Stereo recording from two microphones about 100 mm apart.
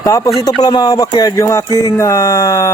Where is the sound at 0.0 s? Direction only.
30° left (ahead or behind).